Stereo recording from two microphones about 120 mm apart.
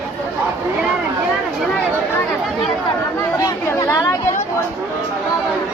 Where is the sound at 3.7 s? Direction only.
25° left (ahead or behind).